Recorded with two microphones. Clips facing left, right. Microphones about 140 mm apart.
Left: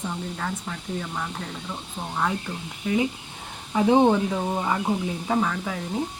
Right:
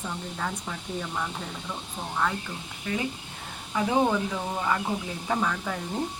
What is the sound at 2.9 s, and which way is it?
Speech, 15° left (ahead or behind).